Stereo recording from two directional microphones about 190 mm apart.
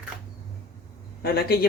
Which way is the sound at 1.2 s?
55° left (ahead or behind).